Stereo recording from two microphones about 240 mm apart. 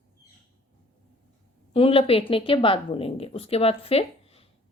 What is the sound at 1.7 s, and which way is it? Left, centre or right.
A woman's voice, left.